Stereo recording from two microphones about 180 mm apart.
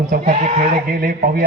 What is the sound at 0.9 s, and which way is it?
Speech, 50° right (ahead or behind).